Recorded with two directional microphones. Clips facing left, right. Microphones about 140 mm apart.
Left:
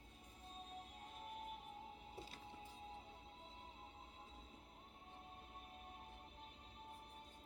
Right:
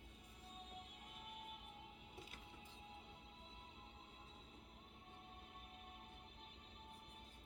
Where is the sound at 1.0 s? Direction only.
35° left (ahead or behind).